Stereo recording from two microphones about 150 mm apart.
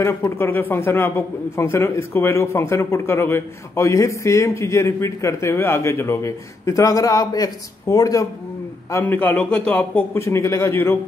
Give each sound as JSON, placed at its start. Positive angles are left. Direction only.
{"t": 0.0, "sound": "a man's voice", "side_deg": 15}
{"t": 8.9, "sound": "a man's voice", "side_deg": 15}